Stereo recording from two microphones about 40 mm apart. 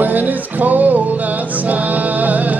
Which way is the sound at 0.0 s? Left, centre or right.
Right.